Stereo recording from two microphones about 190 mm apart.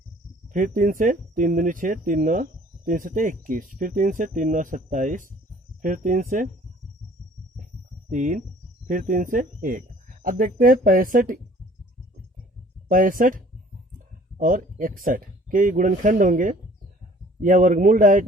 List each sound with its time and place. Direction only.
0.4 s speech: 45° right (ahead or behind)
8.1 s speech: 40° right (ahead or behind)
12.9 s speech: 45° right (ahead or behind)